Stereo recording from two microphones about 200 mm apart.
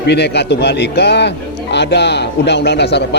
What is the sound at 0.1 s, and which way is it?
A man's voice, 55° left (ahead or behind).